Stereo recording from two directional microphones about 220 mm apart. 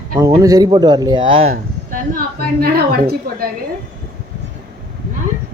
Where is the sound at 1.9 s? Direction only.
40° right (ahead or behind).